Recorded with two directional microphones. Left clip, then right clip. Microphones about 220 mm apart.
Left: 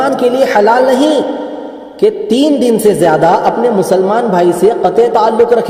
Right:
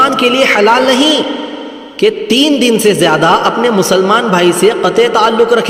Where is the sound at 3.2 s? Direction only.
25° right (ahead or behind).